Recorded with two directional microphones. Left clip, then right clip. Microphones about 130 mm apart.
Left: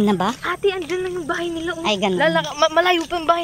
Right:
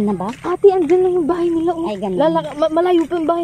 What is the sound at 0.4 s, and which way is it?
Speech, 30° right (ahead or behind).